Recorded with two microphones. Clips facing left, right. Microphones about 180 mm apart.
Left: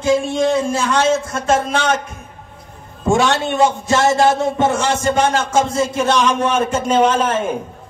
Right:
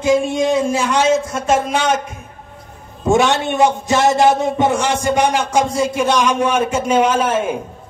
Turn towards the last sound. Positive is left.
turn(degrees=-10)  # may be behind; listen again after turning